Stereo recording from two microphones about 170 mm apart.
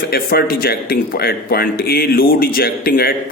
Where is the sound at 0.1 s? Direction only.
65° left (ahead or behind).